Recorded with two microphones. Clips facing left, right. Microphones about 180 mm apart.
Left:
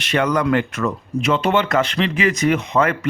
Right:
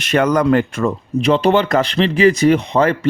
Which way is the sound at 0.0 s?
45° right (ahead or behind).